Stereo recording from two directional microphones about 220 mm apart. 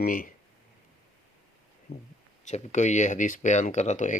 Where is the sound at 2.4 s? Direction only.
30° left (ahead or behind).